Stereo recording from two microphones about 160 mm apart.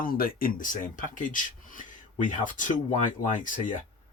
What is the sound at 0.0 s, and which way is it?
Speech, 65° left (ahead or behind).